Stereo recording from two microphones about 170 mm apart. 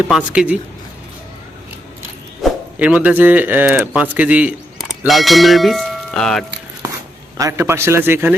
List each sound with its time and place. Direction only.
0.1 s speech: 5° right (ahead or behind)
2.4 s speech: 5° right (ahead or behind)
6.8 s a sound: 20° right (ahead or behind)
7.3 s a man's voice: 20° right (ahead or behind)